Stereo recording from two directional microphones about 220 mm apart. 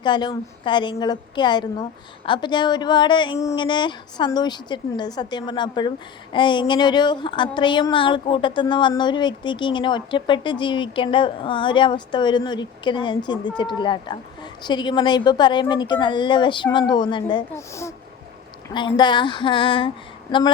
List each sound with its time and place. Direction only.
0.0 s a woman's voice: 20° left (ahead or behind)